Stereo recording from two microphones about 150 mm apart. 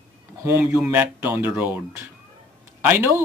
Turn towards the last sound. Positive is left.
turn(degrees=-15)  # may be behind; listen again after turning